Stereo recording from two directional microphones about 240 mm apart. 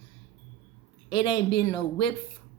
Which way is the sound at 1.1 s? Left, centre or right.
Centre.